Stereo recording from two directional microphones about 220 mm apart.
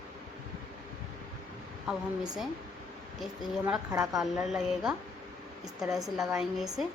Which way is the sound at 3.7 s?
5° right (ahead or behind).